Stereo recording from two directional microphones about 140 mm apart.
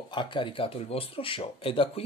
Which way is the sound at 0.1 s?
35° left (ahead or behind).